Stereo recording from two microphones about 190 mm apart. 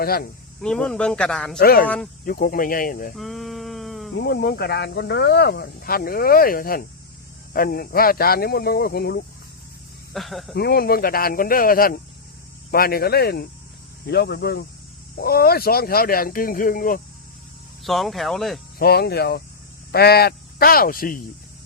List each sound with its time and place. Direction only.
0.0 s speech: 55° left (ahead or behind)
0.6 s speech: 5° left (ahead or behind)
1.5 s speech: 50° left (ahead or behind)
3.2 s a sound: centre (ahead or behind)
4.1 s speech: 60° left (ahead or behind)
10.1 s speech: centre (ahead or behind)
10.5 s speech: 55° left (ahead or behind)
17.8 s speech: centre (ahead or behind)
18.8 s speech: 55° left (ahead or behind)